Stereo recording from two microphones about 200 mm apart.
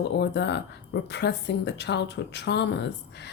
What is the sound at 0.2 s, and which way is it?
Speech, 60° left (ahead or behind).